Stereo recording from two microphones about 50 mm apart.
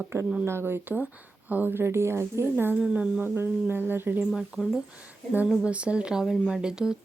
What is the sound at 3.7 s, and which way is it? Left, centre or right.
Speech, right.